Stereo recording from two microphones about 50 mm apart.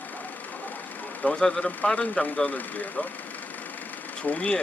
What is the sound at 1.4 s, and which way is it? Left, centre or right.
Speech, centre.